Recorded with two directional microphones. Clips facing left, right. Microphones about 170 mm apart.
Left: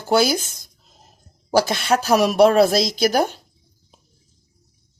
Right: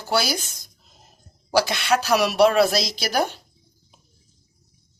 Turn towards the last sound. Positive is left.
turn(degrees=45)  # may be behind; listen again after turning